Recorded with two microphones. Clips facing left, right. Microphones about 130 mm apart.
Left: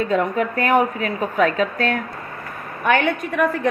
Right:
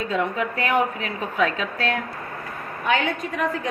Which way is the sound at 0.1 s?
45° left (ahead or behind).